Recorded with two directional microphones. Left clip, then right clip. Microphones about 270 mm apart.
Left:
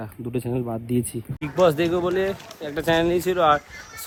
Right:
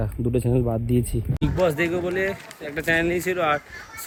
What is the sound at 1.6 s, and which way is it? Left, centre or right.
Speech, centre.